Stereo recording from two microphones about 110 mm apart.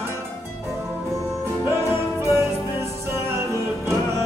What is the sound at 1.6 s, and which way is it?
Music, 25° right (ahead or behind).